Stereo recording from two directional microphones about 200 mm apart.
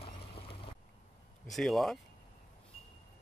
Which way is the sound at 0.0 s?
25° left (ahead or behind).